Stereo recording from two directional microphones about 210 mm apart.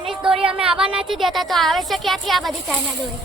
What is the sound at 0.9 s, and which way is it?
A woman's voice, centre (ahead or behind).